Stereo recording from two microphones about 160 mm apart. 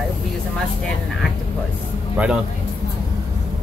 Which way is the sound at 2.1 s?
5° right (ahead or behind).